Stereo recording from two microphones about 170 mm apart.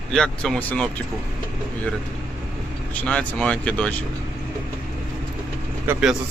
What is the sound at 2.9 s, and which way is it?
Speech, 5° left (ahead or behind).